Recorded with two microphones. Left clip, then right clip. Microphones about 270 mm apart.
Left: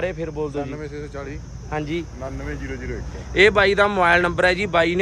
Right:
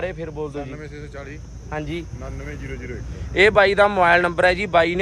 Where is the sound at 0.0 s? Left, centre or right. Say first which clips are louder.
Left 2 dB; centre.